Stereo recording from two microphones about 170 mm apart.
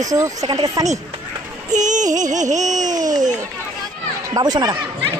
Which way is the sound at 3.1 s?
50° right (ahead or behind).